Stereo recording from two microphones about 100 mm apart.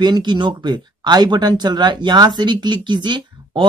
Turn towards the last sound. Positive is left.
turn(degrees=-50)  # may be behind; listen again after turning